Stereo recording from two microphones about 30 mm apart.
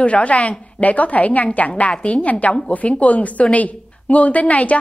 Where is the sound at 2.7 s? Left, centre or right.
Left.